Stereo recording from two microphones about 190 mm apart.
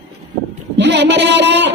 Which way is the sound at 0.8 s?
65° right (ahead or behind).